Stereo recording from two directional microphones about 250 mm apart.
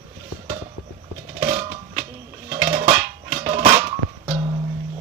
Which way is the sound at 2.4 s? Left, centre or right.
Right.